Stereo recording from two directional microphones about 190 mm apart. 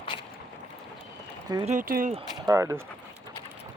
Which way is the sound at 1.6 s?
45° right (ahead or behind).